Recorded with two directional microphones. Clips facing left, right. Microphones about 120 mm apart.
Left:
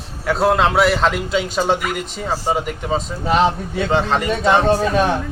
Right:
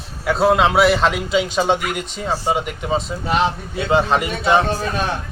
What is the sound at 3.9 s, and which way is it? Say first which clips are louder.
Speech: right 2 dB; 10° right (ahead or behind).